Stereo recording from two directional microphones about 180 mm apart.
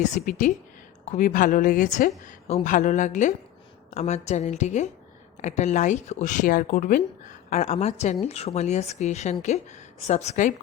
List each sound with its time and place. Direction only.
0.0 s a woman's voice: 45° left (ahead or behind)